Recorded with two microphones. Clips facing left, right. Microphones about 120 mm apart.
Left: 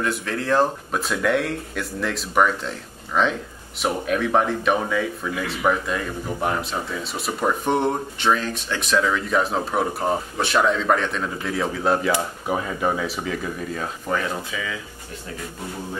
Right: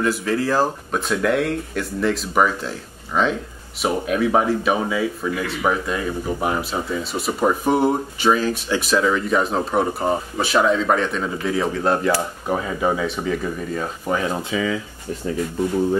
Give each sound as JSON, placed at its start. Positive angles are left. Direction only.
{"t": 0.0, "sound": "speech", "side_deg": 0}
{"t": 14.5, "sound": "speech", "side_deg": -35}